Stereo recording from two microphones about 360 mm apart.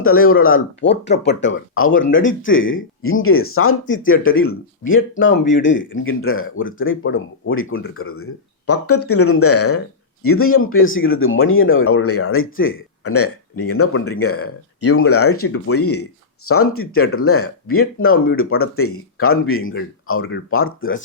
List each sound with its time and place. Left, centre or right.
0.0 s speech: left